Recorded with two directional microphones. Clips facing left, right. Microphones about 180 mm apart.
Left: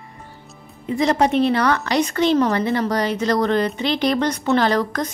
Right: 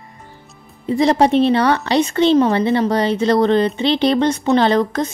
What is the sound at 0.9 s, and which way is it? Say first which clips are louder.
Speech: right 4 dB; 35° right (ahead or behind).